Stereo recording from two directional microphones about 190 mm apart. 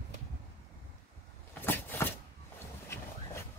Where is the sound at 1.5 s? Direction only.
10° left (ahead or behind).